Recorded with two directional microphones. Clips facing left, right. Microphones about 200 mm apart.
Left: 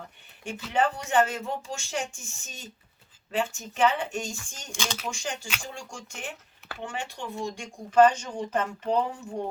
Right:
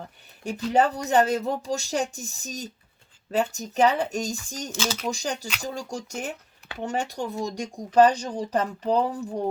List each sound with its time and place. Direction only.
0.4 s speech: 40° right (ahead or behind)
4.7 s speech: 5° right (ahead or behind)
5.0 s speech: 40° right (ahead or behind)